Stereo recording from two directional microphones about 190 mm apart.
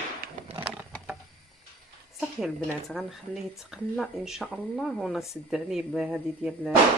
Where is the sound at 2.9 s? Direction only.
Centre (ahead or behind).